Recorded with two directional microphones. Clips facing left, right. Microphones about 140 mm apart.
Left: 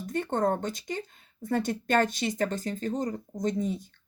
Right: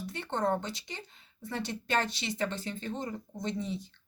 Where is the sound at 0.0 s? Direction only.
45° left (ahead or behind).